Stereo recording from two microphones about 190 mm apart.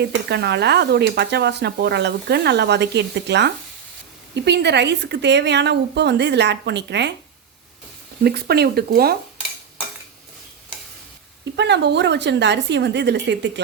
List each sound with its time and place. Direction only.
0.0 s speech: 60° right (ahead or behind)
8.2 s speech: 60° right (ahead or behind)
11.5 s speech: 65° right (ahead or behind)